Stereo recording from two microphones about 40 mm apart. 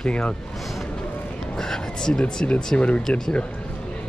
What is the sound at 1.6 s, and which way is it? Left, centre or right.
Speech, centre.